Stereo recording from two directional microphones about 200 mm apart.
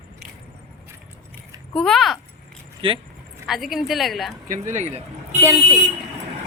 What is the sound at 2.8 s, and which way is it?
Speech, 25° right (ahead or behind).